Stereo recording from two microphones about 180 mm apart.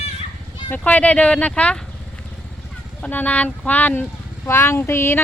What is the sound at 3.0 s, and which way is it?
Speech, 10° left (ahead or behind).